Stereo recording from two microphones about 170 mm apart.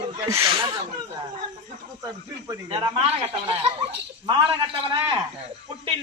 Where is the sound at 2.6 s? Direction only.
35° right (ahead or behind).